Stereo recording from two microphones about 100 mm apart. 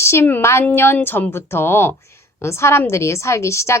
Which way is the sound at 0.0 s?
25° left (ahead or behind).